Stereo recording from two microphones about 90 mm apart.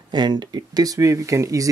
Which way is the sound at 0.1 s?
55° right (ahead or behind).